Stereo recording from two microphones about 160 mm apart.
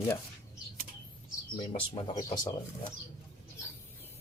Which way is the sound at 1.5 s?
30° left (ahead or behind).